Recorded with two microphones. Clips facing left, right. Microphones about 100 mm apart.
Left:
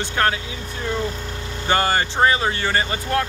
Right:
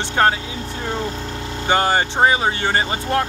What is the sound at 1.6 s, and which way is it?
Speech, 20° right (ahead or behind).